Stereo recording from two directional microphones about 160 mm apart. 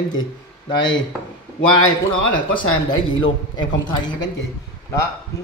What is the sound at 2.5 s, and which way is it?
Speech, 30° left (ahead or behind).